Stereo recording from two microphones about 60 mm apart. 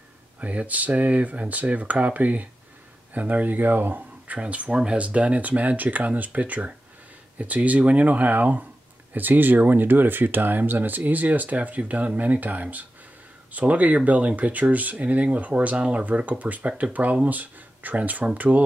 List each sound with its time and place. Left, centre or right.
0.4 s speech: right